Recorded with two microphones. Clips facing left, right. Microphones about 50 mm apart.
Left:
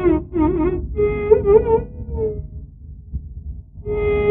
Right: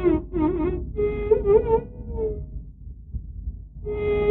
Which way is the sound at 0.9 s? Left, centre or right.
Left.